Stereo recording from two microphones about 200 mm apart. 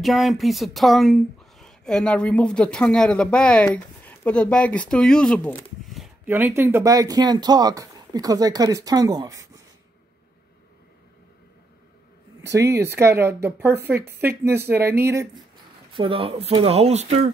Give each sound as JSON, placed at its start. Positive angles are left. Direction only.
{"t": 0.0, "sound": "speech", "side_deg": 0}
{"t": 6.2, "sound": "speech", "side_deg": -10}
{"t": 12.4, "sound": "speech", "side_deg": -15}
{"t": 15.9, "sound": "speech", "side_deg": -25}